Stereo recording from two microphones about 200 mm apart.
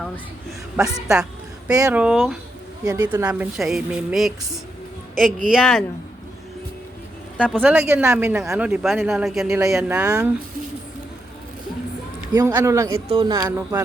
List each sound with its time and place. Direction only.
0.8 s a woman's voice: centre (ahead or behind)
2.8 s speech: 20° right (ahead or behind); by 4.3 s centre (ahead or behind)
5.5 s speech: centre (ahead or behind)
7.5 s speech: 10° right (ahead or behind)
10.1 s speech: 15° right (ahead or behind)
12.3 s speech: 15° right (ahead or behind)